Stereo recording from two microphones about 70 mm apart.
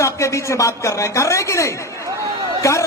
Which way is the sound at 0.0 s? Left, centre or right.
Left.